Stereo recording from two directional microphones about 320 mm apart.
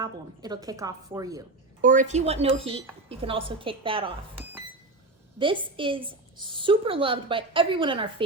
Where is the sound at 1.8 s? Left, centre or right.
Right.